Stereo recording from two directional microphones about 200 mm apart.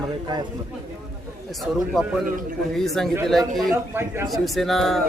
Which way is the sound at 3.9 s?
10° right (ahead or behind).